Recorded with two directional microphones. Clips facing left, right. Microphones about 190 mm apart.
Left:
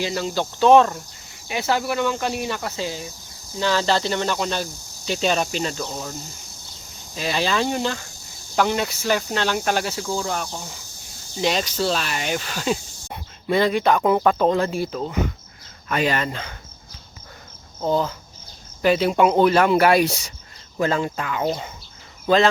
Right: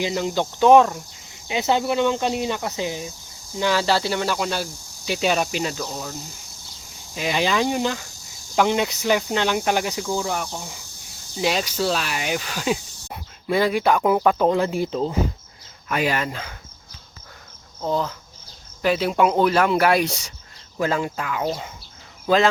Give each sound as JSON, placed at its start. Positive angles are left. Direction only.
{"t": 0.0, "sound": "speech", "side_deg": -15}
{"t": 1.5, "sound": "speech", "side_deg": -20}
{"t": 7.2, "sound": "speech", "side_deg": -15}
{"t": 15.9, "sound": "speech", "side_deg": -10}
{"t": 17.7, "sound": "speech", "side_deg": 5}